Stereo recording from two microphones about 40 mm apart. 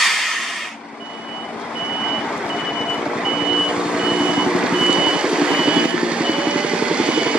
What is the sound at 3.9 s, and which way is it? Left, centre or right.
Reversing beeps, right.